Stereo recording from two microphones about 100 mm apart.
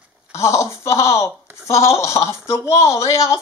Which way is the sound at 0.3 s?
30° left (ahead or behind).